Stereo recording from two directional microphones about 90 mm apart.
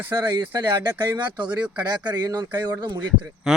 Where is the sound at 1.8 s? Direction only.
50° right (ahead or behind).